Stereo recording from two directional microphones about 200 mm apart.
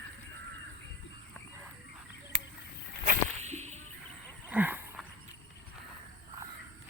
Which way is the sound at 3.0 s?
35° right (ahead or behind).